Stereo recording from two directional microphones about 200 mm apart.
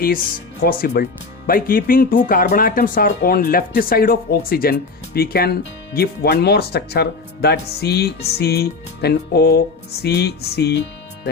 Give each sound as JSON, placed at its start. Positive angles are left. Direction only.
{"t": 0.6, "sound": "speech", "side_deg": 45}
{"t": 10.0, "sound": "music", "side_deg": 55}